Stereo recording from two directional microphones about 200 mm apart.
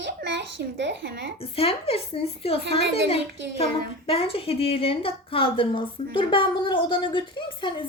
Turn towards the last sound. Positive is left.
turn(degrees=25)  # may be behind; listen again after turning